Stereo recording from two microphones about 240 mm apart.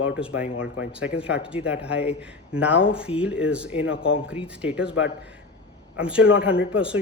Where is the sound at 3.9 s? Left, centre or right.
Left.